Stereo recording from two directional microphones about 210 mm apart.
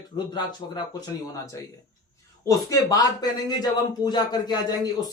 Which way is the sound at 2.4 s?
15° left (ahead or behind).